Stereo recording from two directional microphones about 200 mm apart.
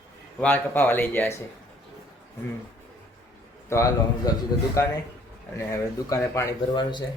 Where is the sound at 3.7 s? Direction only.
15° left (ahead or behind).